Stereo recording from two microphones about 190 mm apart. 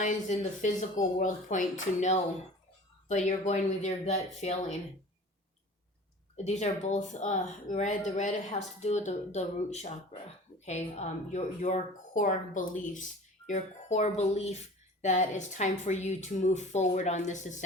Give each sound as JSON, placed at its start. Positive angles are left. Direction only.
{"t": 0.0, "sound": "a woman's voice", "side_deg": 40}
{"t": 6.3, "sound": "a woman's voice", "side_deg": 35}